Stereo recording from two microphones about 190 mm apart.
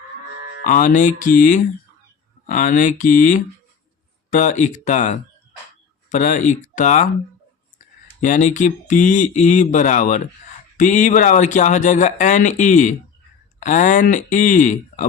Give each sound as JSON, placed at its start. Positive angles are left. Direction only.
{"t": 0.6, "sound": "speech", "side_deg": 45}
{"t": 8.2, "sound": "speech", "side_deg": 40}